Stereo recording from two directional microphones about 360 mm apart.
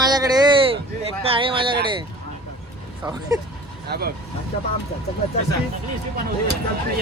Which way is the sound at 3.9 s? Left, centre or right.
Right.